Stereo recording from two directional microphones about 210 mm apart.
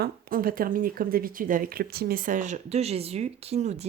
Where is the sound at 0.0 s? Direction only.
45° right (ahead or behind).